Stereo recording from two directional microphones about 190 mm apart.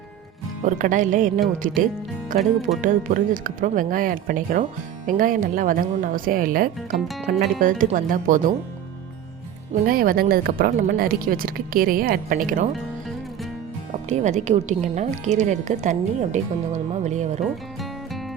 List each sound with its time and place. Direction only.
0.6 s a woman's voice: 40° right (ahead or behind)
9.8 s speech: 50° right (ahead or behind)
14.1 s a woman's voice: 40° right (ahead or behind)